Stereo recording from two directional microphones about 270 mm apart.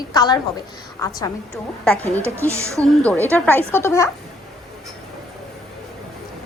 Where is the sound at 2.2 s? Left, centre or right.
Centre.